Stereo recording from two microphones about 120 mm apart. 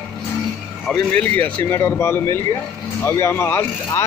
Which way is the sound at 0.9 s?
10° left (ahead or behind).